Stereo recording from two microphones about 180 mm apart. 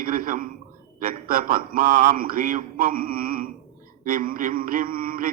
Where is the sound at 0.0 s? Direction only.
50° right (ahead or behind).